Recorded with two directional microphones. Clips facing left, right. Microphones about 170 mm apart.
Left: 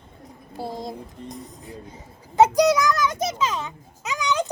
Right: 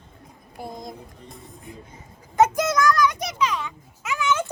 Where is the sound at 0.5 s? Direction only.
30° left (ahead or behind).